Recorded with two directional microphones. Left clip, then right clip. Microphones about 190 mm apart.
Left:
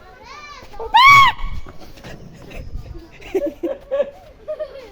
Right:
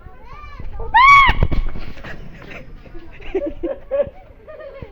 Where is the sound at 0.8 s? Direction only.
15° left (ahead or behind).